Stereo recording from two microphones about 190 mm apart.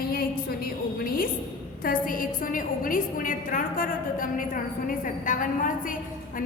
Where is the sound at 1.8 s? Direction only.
45° left (ahead or behind).